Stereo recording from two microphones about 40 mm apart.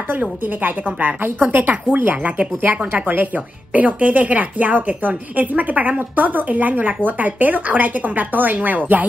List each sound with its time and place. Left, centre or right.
0.1 s speech: right